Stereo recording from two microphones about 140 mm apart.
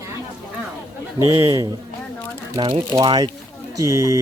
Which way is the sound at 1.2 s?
20° right (ahead or behind).